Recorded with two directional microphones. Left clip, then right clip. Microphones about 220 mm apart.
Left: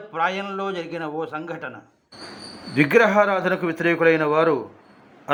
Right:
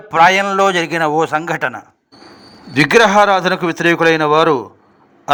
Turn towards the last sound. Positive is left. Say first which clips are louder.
# right 7 dB
turn(degrees=-40)  # may be behind; listen again after turning